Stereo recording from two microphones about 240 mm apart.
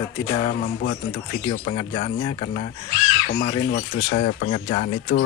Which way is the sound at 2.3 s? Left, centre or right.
Left.